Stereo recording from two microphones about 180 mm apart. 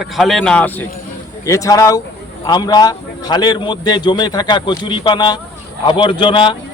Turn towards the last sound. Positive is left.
turn(degrees=25)  # may be behind; listen again after turning